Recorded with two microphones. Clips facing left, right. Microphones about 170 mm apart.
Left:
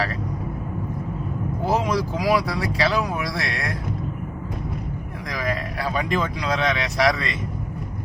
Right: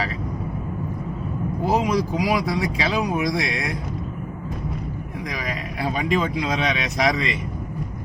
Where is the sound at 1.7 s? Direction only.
15° right (ahead or behind).